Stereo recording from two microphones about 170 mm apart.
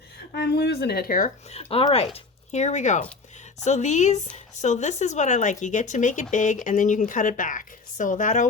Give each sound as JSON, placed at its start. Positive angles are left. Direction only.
{"t": 0.3, "sound": "speech", "side_deg": 75}
{"t": 1.5, "sound": "a woman's voice", "side_deg": 35}